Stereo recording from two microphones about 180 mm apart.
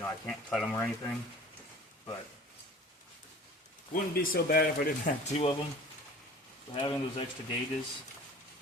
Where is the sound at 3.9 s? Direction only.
55° left (ahead or behind).